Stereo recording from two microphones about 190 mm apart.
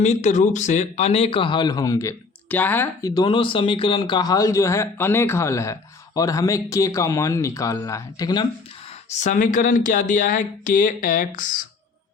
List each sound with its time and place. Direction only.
0.0 s speech: 40° left (ahead or behind); by 3.1 s 10° left (ahead or behind)
3.2 s a man's voice: 25° left (ahead or behind)
9.1 s speech: 40° left (ahead or behind)